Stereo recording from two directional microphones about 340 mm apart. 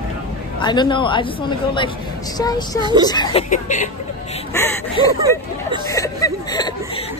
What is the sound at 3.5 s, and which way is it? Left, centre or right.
Speech, left.